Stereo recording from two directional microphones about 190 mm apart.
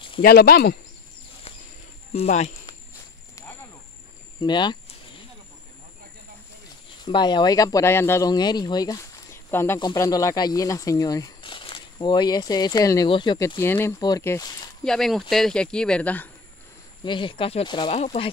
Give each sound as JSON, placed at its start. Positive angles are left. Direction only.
{"t": 0.2, "sound": "speech", "side_deg": 50}
{"t": 2.1, "sound": "speech", "side_deg": 35}
{"t": 4.4, "sound": "speech", "side_deg": 25}
{"t": 7.1, "sound": "speech", "side_deg": 25}
{"t": 13.6, "sound": "speech", "side_deg": 10}
{"t": 14.9, "sound": "speech", "side_deg": 0}
{"t": 17.0, "sound": "speech", "side_deg": 25}